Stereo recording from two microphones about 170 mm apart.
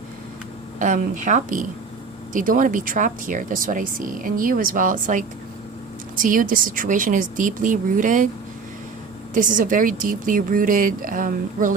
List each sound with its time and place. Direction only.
0.8 s speech: 50° right (ahead or behind)
9.3 s speech: 50° right (ahead or behind)